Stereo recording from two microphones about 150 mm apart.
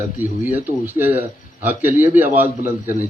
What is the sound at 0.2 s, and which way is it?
Speech, 10° right (ahead or behind).